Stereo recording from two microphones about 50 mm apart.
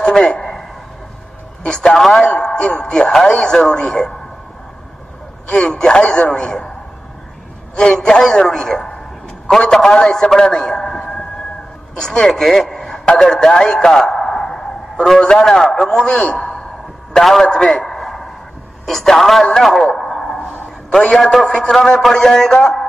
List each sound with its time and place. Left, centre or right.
0.3 s a sound: centre
1.7 s a man's voice: centre
2.2 s a man's voice: centre
3.3 s a man's voice: left
5.5 s a man's voice: centre
7.7 s a man's voice: centre
16.3 s a sound: centre
17.1 s a man's voice: centre
17.5 s a sound: centre
18.9 s a man's voice: centre
19.4 s a sound: centre
20.9 s a man's voice: centre